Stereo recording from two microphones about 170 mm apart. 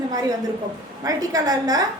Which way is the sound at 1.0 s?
20° right (ahead or behind).